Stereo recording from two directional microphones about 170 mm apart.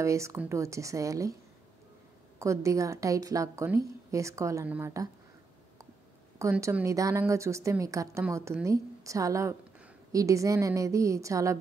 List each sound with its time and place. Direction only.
0.0 s a woman's voice: 15° right (ahead or behind)
2.3 s a woman's voice: 15° right (ahead or behind)
6.3 s a woman's voice: 15° right (ahead or behind)